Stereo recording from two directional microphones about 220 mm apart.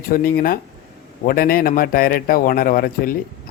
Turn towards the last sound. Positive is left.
turn(degrees=40)  # may be behind; listen again after turning